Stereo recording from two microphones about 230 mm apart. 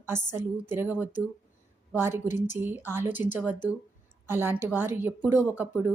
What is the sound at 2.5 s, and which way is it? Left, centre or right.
A woman's voice, centre.